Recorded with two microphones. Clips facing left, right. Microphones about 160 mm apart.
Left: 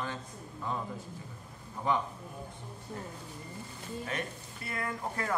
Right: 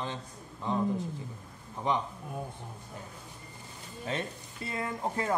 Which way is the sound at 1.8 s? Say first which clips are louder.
Even; 20° right (ahead or behind).